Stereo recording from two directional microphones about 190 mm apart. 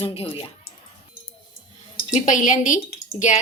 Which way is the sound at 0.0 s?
30° left (ahead or behind).